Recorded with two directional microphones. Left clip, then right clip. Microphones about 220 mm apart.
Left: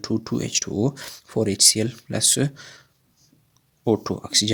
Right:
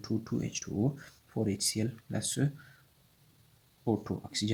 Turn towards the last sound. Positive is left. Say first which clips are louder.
# left 14 dB
turn(degrees=45)  # may be behind; listen again after turning